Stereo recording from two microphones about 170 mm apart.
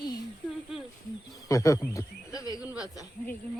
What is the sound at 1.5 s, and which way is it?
Speech, 20° left (ahead or behind).